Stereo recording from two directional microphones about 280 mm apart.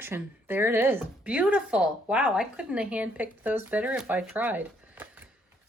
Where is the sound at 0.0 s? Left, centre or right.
Centre.